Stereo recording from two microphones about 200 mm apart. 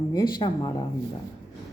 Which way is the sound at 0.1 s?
20° left (ahead or behind).